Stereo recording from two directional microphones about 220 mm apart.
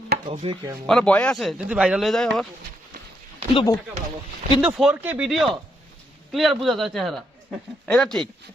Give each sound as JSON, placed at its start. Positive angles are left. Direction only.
{"t": 0.1, "sound": "a sound", "side_deg": -35}
{"t": 0.9, "sound": "speech", "side_deg": 5}
{"t": 3.5, "sound": "speech", "side_deg": 20}
{"t": 4.6, "sound": "speech", "side_deg": -5}